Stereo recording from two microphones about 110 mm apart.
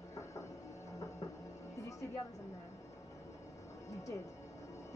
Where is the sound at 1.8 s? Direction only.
30° left (ahead or behind).